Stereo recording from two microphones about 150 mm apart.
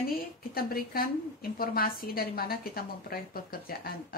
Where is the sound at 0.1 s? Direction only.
85° left.